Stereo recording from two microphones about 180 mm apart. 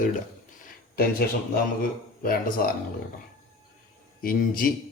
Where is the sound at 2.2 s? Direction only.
55° left (ahead or behind).